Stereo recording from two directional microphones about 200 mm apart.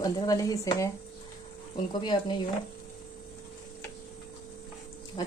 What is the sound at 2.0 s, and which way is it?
Speech, 20° left (ahead or behind).